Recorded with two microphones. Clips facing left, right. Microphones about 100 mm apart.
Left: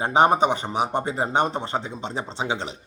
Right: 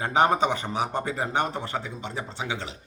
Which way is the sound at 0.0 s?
20° left (ahead or behind).